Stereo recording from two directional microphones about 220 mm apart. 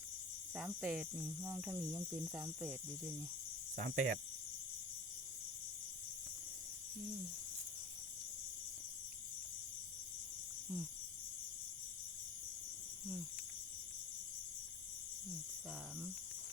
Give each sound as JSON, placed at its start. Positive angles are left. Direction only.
{"t": 0.5, "sound": "speech", "side_deg": -5}
{"t": 3.8, "sound": "speech", "side_deg": -35}